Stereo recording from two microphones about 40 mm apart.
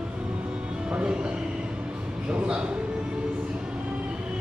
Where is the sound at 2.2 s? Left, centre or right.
Right.